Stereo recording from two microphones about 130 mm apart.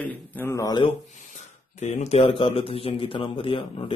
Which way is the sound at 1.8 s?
60° left (ahead or behind).